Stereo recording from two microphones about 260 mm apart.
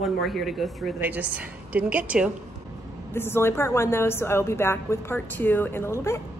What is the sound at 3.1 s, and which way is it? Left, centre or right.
A woman's voice, centre.